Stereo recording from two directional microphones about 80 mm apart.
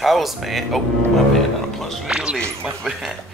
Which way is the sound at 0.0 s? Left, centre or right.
Centre.